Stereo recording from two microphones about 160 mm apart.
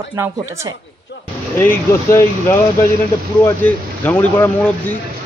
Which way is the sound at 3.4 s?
10° left (ahead or behind).